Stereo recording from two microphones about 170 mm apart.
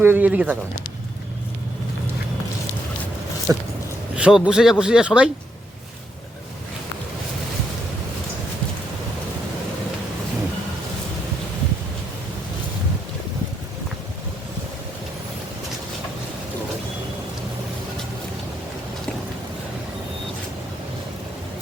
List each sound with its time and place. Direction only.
0.0 s speech: 10° right (ahead or behind)
3.5 s a sound: 20° right (ahead or behind)
4.2 s speech: 5° right (ahead or behind)